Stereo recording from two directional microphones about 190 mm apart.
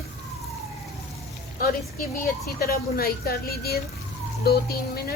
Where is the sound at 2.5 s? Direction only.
50° left (ahead or behind).